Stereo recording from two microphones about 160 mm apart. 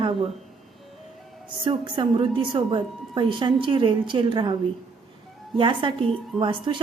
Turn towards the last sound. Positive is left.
turn(degrees=-30)  # may be behind; listen again after turning